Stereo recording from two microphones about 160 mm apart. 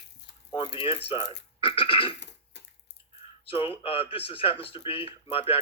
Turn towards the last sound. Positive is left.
turn(degrees=35)  # may be behind; listen again after turning